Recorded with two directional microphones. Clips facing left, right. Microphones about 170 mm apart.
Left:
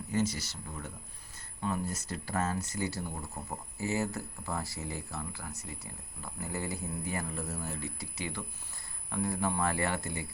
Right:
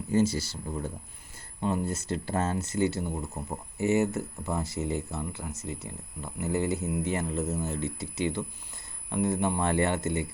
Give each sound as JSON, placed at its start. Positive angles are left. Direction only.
{"t": 0.1, "sound": "speech", "side_deg": -30}